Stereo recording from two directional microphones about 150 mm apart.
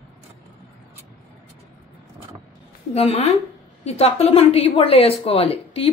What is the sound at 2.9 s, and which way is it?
A woman's voice, 45° left (ahead or behind).